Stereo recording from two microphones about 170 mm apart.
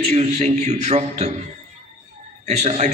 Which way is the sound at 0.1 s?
40° right (ahead or behind).